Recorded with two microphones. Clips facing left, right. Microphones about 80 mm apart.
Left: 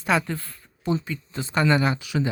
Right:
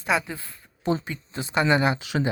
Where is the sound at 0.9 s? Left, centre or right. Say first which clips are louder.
Even; right.